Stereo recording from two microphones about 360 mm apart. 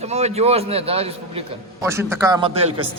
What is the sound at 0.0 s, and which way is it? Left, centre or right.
A man's voice, centre.